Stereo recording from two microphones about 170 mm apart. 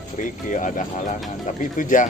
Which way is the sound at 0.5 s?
50° left (ahead or behind).